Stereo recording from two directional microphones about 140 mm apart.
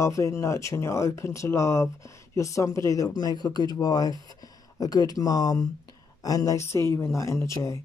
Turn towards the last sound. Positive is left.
turn(degrees=20)  # may be behind; listen again after turning